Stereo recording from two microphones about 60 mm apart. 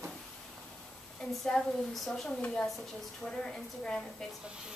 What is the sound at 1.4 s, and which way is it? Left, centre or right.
Speech, centre.